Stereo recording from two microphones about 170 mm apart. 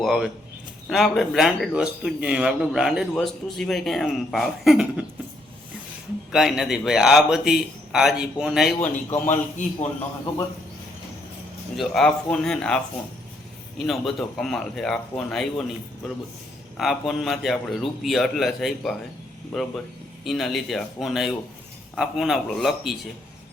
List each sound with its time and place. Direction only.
0.0 s speech: 5° right (ahead or behind)
6.3 s speech: centre (ahead or behind)
9.0 s a man's voice: 15° left (ahead or behind)
9.6 s a man's voice: 45° left (ahead or behind)
11.8 s speech: 5° left (ahead or behind)
16.7 s speech: centre (ahead or behind)